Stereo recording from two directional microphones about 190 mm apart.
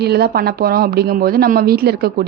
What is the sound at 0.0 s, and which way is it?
A woman's voice, 60° right (ahead or behind).